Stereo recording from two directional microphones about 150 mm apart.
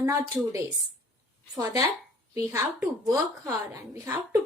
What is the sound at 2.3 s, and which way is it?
A woman's voice, 20° right (ahead or behind).